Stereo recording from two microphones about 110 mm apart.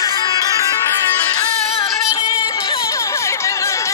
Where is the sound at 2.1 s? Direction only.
35° left (ahead or behind).